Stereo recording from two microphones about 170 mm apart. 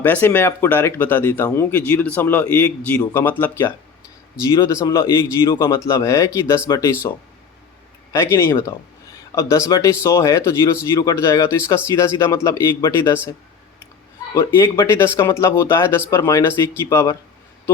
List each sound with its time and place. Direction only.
0.0 s speech: 10° left (ahead or behind)
8.1 s speech: 15° left (ahead or behind)
14.3 s speech: 15° left (ahead or behind)